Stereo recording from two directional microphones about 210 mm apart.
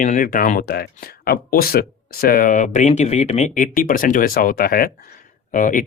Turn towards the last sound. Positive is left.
turn(degrees=40)  # may be behind; listen again after turning